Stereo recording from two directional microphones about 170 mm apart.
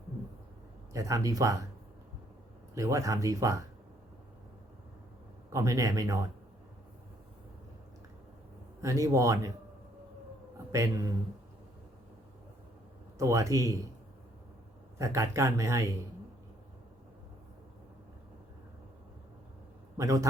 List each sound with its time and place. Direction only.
0.9 s speech: 20° right (ahead or behind)
2.7 s speech: 20° right (ahead or behind)
5.5 s speech: 20° right (ahead or behind)
8.8 s speech: 20° right (ahead or behind)
10.7 s speech: 20° right (ahead or behind)
13.1 s speech: 20° right (ahead or behind)
14.9 s speech: 20° right (ahead or behind)
20.0 s speech: 20° right (ahead or behind)